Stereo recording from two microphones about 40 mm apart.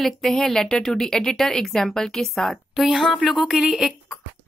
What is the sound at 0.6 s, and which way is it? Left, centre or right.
Speech, centre.